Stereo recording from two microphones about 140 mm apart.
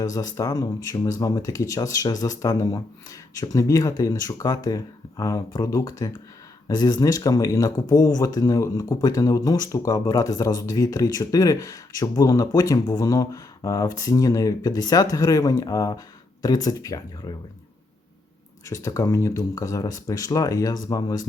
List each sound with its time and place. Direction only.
0.0 s speech: 25° left (ahead or behind)
18.7 s speech: 25° left (ahead or behind)